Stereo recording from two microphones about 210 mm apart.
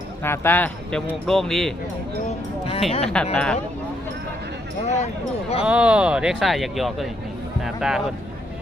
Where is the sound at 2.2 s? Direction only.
30° left (ahead or behind).